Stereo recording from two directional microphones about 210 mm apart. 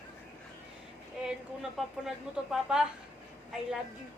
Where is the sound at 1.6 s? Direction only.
Centre (ahead or behind).